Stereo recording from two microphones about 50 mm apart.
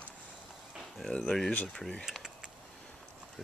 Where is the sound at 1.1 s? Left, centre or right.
Centre.